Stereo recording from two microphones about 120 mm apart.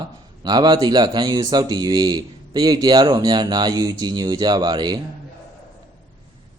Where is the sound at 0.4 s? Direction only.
35° right (ahead or behind).